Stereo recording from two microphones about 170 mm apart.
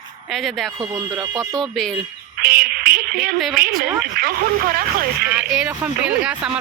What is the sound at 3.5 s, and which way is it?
Speech, 60° right (ahead or behind).